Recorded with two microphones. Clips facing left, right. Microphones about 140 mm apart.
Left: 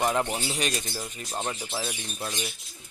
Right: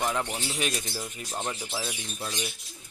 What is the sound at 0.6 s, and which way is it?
Speech, 5° right (ahead or behind).